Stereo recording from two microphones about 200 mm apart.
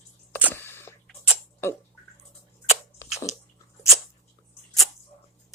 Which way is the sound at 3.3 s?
35° left (ahead or behind).